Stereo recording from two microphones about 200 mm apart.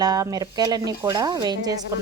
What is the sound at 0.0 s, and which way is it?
Speech, 20° right (ahead or behind).